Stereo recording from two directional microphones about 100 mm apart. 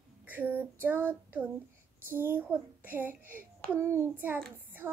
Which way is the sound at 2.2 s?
20° right (ahead or behind).